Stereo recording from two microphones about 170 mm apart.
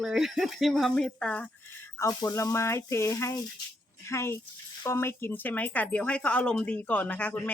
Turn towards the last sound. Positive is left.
turn(degrees=10)  # may be behind; listen again after turning